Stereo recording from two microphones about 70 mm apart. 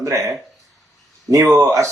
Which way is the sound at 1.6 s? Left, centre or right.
Right.